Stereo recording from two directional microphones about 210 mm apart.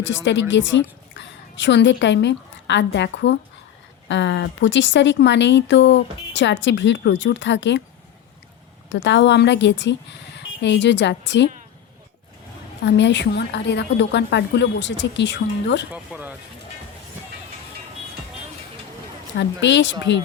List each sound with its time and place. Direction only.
0.0 s speech: 60° left (ahead or behind)
8.9 s speech: 60° left (ahead or behind)
12.8 s speech: 55° left (ahead or behind)
15.9 s speech: 10° right (ahead or behind)
19.4 s speech: 60° left (ahead or behind)